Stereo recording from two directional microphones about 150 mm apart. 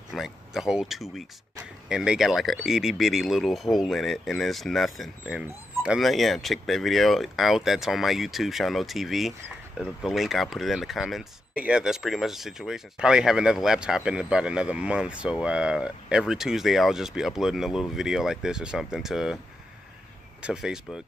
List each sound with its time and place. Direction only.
0.1 s speech: centre (ahead or behind)
20.4 s speech: 5° right (ahead or behind)